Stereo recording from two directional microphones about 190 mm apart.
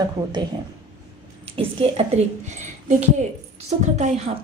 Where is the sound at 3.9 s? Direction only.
35° right (ahead or behind).